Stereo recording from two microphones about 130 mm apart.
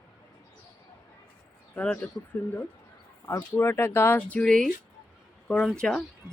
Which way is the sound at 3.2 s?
20° left (ahead or behind).